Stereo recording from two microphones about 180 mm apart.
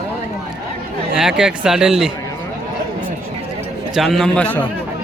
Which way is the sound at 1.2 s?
5° right (ahead or behind).